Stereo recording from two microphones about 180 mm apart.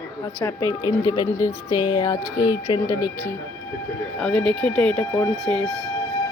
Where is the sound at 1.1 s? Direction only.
20° left (ahead or behind).